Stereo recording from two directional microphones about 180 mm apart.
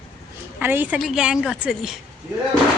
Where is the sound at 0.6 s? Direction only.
10° right (ahead or behind).